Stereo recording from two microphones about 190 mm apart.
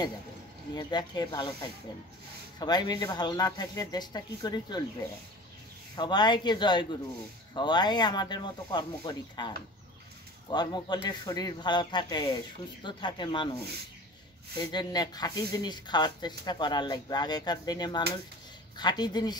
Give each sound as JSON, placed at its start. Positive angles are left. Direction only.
{"t": 0.7, "sound": "speech", "side_deg": 20}
{"t": 5.9, "sound": "speech", "side_deg": 25}
{"t": 14.7, "sound": "speech", "side_deg": 20}